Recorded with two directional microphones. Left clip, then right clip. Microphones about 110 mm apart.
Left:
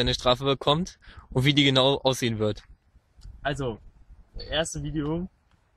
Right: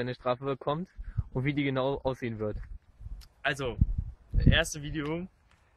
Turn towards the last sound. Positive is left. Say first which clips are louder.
# left 4 dB
turn(degrees=-20)  # may be behind; listen again after turning